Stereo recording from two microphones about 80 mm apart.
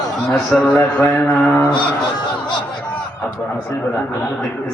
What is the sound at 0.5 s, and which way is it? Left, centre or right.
Speech, centre.